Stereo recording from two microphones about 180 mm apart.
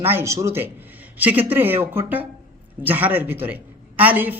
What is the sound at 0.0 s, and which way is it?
A man's voice, 10° right (ahead or behind).